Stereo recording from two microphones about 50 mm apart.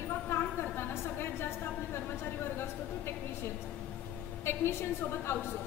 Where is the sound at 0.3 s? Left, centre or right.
Left.